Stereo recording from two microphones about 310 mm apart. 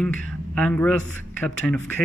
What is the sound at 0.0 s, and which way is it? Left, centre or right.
Speech, centre.